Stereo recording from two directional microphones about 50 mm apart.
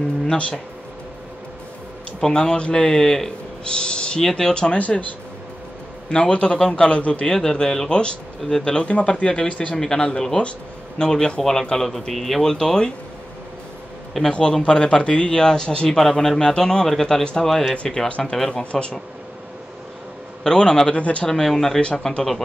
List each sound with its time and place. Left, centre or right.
2.1 s a man's voice: centre
4.7 s speech: left
6.0 s a man's voice: centre
7.2 s a man's voice: centre
14.3 s a man's voice: centre
17.2 s a man's voice: centre
17.5 s speech: centre
17.8 s a man's voice: centre
20.4 s a man's voice: centre
20.9 s a man's voice: left
21.3 s a man's voice: centre